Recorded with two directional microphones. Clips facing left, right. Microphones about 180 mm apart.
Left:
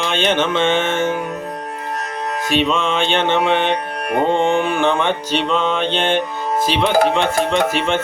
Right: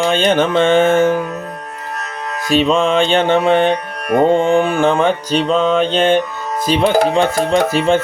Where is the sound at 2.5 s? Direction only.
35° right (ahead or behind).